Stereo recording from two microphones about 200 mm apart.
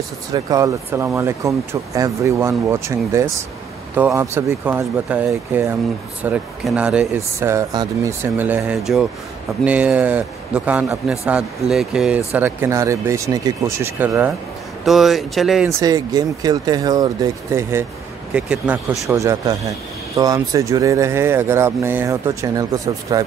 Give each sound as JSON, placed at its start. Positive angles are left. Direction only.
{"t": 0.3, "sound": "speech", "side_deg": -15}
{"t": 15.8, "sound": "speech", "side_deg": -20}
{"t": 19.1, "sound": "speech", "side_deg": -15}